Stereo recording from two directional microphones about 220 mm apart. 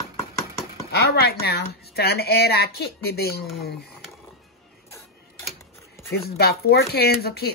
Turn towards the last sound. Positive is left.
turn(degrees=45)  # may be behind; listen again after turning